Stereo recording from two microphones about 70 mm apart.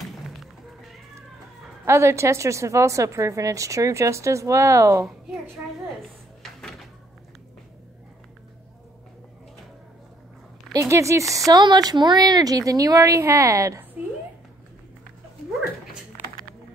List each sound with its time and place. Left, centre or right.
1.9 s a woman's voice: right
10.7 s a woman's voice: right
11.5 s a woman's voice: right
14.0 s a woman's voice: right